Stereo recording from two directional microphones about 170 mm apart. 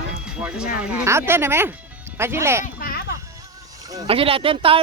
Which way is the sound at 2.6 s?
60° left (ahead or behind).